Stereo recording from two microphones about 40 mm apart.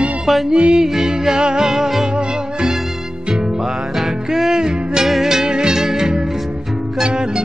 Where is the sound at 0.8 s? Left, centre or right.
Centre.